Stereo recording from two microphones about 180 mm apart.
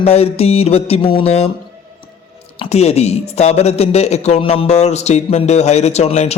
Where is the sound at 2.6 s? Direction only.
35° left (ahead or behind).